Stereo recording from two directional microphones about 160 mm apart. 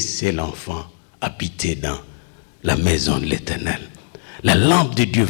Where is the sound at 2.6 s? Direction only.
55° left (ahead or behind).